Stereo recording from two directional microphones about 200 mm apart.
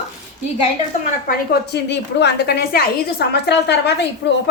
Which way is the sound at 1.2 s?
55° left (ahead or behind).